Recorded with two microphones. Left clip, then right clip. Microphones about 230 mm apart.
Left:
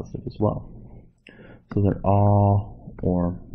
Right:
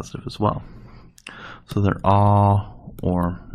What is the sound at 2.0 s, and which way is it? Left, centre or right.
Speech, right.